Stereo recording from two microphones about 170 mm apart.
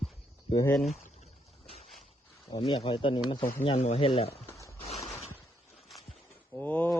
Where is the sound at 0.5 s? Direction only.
15° left (ahead or behind).